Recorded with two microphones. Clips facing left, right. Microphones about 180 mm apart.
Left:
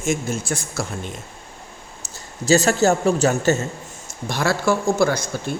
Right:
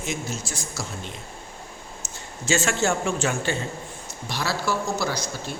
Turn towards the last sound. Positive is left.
turn(degrees=55)  # may be behind; listen again after turning